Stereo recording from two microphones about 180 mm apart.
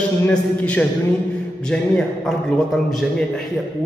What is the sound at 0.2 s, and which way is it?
A man's voice, 10° left (ahead or behind).